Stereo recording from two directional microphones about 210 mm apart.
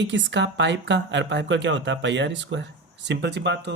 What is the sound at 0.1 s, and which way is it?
Speech, 60° right (ahead or behind).